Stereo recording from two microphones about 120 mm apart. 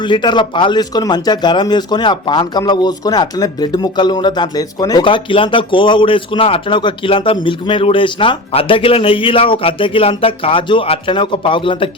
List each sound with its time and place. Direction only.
0.0 s speech: 40° left (ahead or behind)
5.0 s speech: 45° left (ahead or behind)